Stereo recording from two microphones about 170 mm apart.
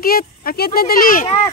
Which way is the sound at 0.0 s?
60° left (ahead or behind).